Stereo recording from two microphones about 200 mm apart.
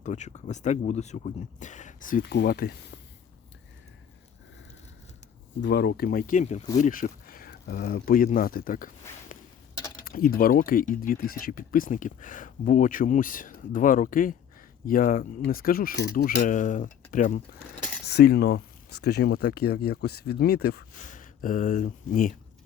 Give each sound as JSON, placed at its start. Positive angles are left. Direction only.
{"t": 0.0, "sound": "speech", "side_deg": 35}
{"t": 5.5, "sound": "speech", "side_deg": 55}
{"t": 10.0, "sound": "speech", "side_deg": 50}
{"t": 18.0, "sound": "speech", "side_deg": 55}
{"t": 21.0, "sound": "speech", "side_deg": 40}